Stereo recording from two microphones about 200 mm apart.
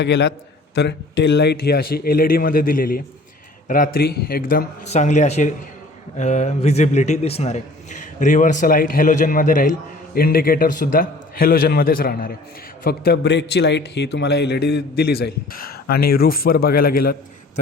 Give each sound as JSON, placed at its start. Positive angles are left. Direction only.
{"t": 0.0, "sound": "a man's voice", "side_deg": 60}
{"t": 4.9, "sound": "a man's voice", "side_deg": 35}